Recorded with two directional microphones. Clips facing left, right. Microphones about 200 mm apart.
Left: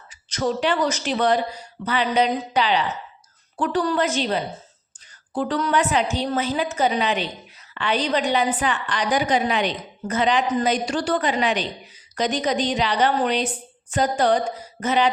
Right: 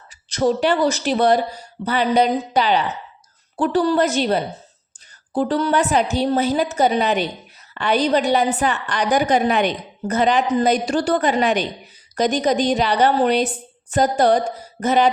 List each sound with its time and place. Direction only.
0.3 s a woman's voice: 40° right (ahead or behind)